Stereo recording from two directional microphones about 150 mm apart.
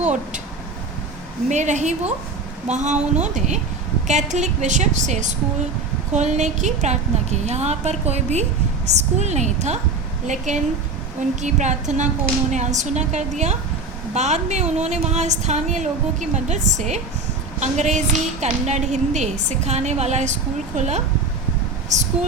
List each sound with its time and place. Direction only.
1.5 s a woman's voice: 50° right (ahead or behind)